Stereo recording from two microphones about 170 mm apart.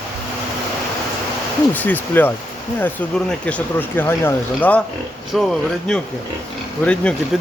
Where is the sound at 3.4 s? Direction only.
10° left (ahead or behind).